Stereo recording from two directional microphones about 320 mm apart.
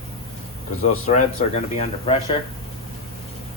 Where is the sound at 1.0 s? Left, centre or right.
Left.